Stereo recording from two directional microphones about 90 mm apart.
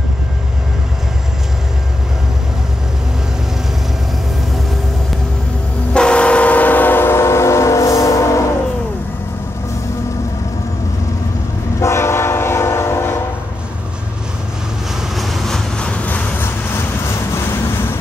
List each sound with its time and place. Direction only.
5.9 s train: 10° left (ahead or behind); by 8.4 s 35° left (ahead or behind)
11.8 s train: 30° left (ahead or behind)
15.1 s vehicle: centre (ahead or behind); by 16.8 s 25° left (ahead or behind)